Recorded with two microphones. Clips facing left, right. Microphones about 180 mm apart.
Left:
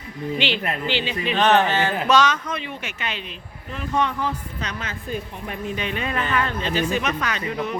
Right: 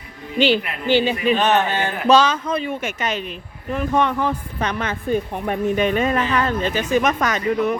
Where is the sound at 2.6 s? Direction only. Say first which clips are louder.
Right 7 dB; 45° right (ahead or behind).